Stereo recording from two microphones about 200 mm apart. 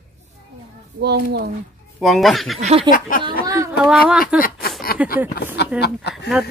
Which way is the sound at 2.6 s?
30° right (ahead or behind).